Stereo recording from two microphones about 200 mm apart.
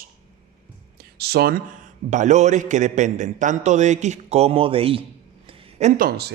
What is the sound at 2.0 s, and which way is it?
A man's voice, 35° right (ahead or behind).